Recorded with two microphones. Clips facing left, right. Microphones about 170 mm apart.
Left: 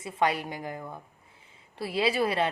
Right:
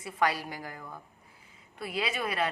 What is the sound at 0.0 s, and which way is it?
A woman's voice, 25° left (ahead or behind).